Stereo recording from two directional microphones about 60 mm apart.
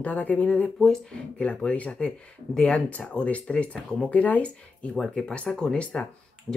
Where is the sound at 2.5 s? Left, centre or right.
Centre.